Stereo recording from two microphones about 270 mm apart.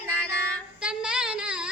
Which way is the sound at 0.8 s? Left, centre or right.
Centre.